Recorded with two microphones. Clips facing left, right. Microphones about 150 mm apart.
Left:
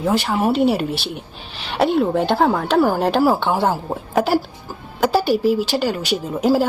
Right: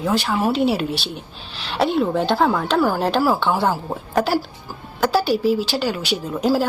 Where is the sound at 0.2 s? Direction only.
15° left (ahead or behind).